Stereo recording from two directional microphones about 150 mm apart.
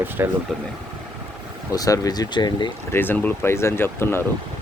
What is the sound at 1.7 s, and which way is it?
Speech, 25° left (ahead or behind).